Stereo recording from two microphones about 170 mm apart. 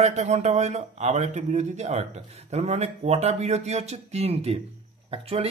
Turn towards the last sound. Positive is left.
turn(degrees=-35)  # may be behind; listen again after turning